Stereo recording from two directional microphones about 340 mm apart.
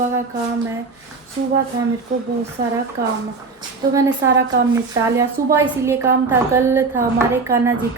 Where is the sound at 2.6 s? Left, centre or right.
Right.